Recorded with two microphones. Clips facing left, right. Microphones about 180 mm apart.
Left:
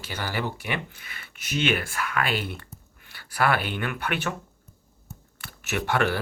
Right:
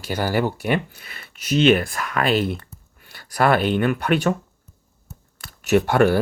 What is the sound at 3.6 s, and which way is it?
Speech, 35° right (ahead or behind).